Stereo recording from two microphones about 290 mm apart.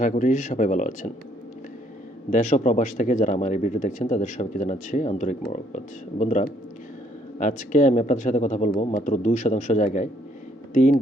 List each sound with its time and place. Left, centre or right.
0.0 s speech: left
2.3 s speech: left